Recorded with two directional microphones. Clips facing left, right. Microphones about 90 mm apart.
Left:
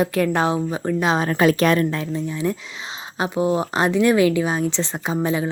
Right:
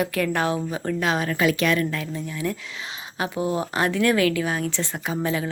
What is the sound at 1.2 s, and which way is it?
Speech, 40° left (ahead or behind).